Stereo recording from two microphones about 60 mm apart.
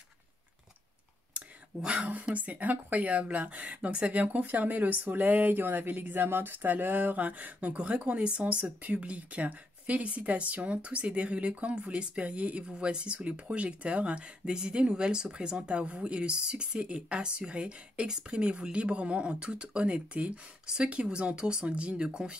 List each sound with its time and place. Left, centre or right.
1.8 s speech: centre